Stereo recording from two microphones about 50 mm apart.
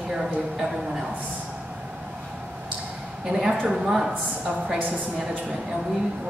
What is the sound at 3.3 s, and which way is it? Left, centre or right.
Speech, centre.